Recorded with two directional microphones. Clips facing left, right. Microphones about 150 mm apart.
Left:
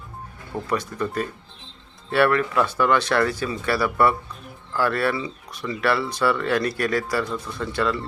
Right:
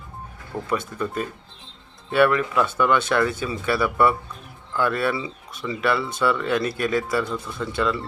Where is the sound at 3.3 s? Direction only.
25° right (ahead or behind).